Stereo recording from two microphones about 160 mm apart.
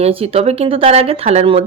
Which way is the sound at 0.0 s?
35° right (ahead or behind).